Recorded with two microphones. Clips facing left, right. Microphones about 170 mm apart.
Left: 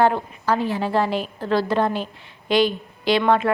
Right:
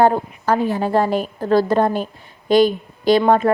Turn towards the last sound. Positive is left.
turn(degrees=-40)  # may be behind; listen again after turning